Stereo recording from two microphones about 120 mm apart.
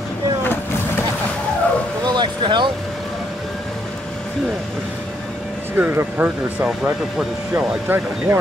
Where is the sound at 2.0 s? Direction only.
40° right (ahead or behind).